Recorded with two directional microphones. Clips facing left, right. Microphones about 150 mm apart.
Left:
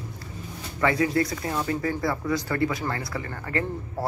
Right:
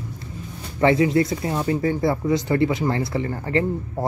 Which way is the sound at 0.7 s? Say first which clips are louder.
Right 6 dB; 25° right (ahead or behind).